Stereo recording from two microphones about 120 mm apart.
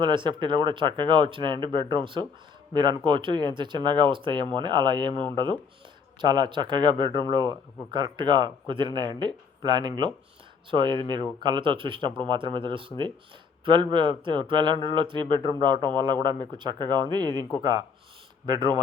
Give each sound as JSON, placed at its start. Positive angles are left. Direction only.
{"t": 0.0, "sound": "speech", "side_deg": -40}